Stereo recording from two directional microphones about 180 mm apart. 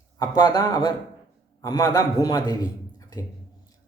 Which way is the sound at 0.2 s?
25° left (ahead or behind).